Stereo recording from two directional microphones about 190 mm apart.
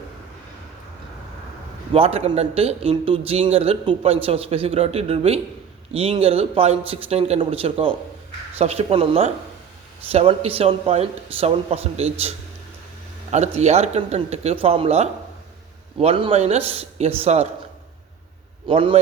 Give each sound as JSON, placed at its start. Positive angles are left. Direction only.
{"t": 1.9, "sound": "a man's voice", "side_deg": -30}
{"t": 13.3, "sound": "a man's voice", "side_deg": -35}
{"t": 18.7, "sound": "a man's voice", "side_deg": -25}